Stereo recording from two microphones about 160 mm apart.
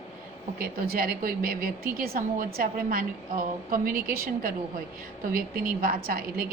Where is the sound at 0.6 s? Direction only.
70° right (ahead or behind).